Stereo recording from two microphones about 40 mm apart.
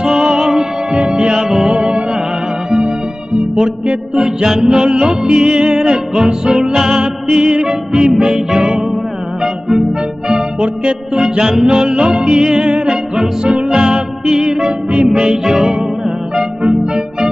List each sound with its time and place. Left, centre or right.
0.0 s music: centre
0.9 s music: right
3.3 s music: centre
3.8 s music: right
10.6 s music: right